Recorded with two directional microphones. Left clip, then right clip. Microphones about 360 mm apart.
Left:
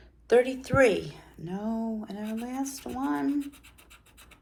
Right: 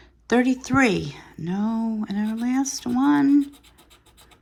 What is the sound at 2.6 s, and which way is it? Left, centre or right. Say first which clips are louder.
Speech: right 9 dB; right.